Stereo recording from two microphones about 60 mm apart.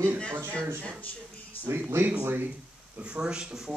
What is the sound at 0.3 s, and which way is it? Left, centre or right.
Speech, right.